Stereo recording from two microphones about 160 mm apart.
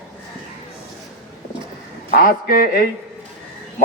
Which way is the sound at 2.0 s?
60° left (ahead or behind).